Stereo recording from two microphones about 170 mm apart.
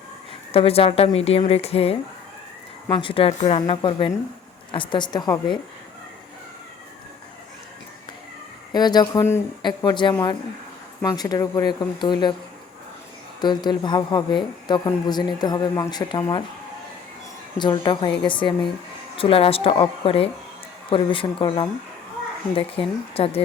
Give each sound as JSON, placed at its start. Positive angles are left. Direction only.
{"t": 0.5, "sound": "a woman's voice", "side_deg": 35}
{"t": 8.7, "sound": "a woman's voice", "side_deg": 25}
{"t": 13.4, "sound": "a woman's voice", "side_deg": 25}
{"t": 17.6, "sound": "a woman's voice", "side_deg": 25}